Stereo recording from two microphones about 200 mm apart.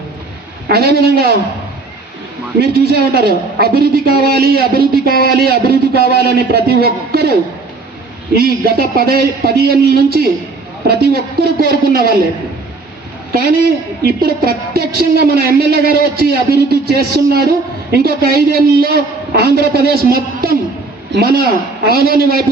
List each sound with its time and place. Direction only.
0.7 s a woman's voice: 50° right (ahead or behind)
2.6 s a woman's voice: 50° right (ahead or behind)
8.4 s a woman's voice: 50° right (ahead or behind)
14.0 s a woman's voice: 50° right (ahead or behind)